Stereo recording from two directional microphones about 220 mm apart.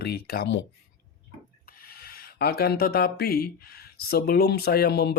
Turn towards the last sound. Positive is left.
turn(degrees=45)  # may be behind; listen again after turning